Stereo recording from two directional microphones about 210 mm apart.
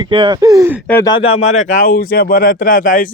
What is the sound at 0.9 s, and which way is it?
Speech, 10° left (ahead or behind).